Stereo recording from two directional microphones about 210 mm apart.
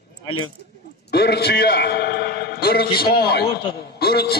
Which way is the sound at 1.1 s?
50° left (ahead or behind).